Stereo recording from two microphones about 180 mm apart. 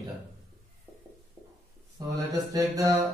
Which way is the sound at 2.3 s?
20° right (ahead or behind).